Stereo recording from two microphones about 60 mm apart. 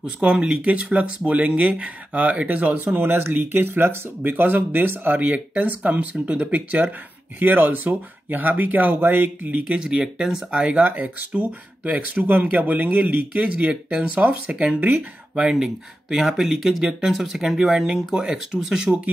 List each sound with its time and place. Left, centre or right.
0.0 s speech: centre; by 9.5 s right
9.5 s speech: right
10.9 s speech: right
14.8 s speech: right
15.3 s speech: centre